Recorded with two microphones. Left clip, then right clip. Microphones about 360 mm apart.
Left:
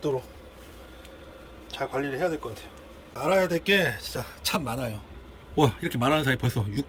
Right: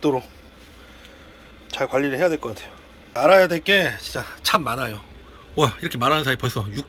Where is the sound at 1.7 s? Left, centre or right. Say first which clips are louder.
Right 8 dB; centre.